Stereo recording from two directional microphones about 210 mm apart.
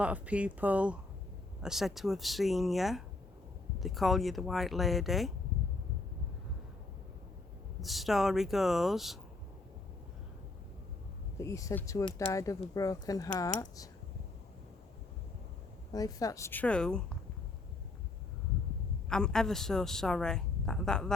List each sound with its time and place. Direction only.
0.0 s a woman's voice: 5° right (ahead or behind)
7.8 s a woman's voice: centre (ahead or behind)
11.3 s a woman's voice: 15° left (ahead or behind)
15.9 s a woman's voice: 15° left (ahead or behind)
19.0 s a woman's voice: 5° left (ahead or behind)